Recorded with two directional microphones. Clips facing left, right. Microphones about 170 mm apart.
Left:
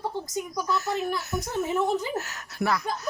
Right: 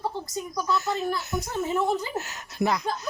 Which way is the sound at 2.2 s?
15° right (ahead or behind).